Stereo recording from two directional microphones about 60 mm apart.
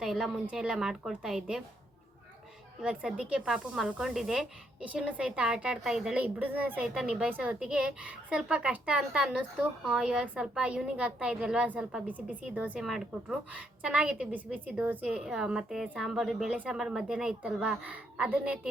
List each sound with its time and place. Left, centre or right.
0.0 s a woman's voice: centre
2.8 s a woman's voice: centre
4.8 s a woman's voice: right
6.1 s a woman's voice: right
6.9 s a woman's voice: centre
7.3 s a woman's voice: right
7.6 s a woman's voice: centre
12.0 s a woman's voice: right
12.8 s a woman's voice: centre
13.2 s a woman's voice: centre
15.0 s a woman's voice: centre
17.9 s a woman's voice: right